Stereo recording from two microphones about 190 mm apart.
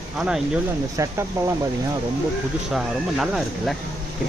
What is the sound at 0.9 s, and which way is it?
Speech, 15° right (ahead or behind).